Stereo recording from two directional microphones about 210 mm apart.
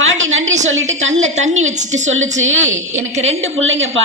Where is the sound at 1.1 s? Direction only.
35° right (ahead or behind).